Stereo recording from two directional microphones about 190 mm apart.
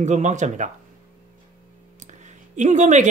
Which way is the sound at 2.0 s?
40° right (ahead or behind).